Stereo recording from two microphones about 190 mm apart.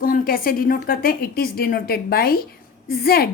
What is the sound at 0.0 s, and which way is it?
A woman's voice, 50° left (ahead or behind).